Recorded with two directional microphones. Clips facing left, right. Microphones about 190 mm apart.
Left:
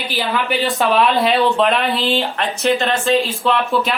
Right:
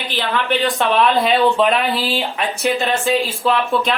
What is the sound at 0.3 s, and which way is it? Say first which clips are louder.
Speech: right 1 dB; centre (ahead or behind).